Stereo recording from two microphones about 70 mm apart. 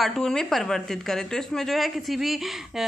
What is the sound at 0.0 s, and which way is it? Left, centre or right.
A woman's voice, centre.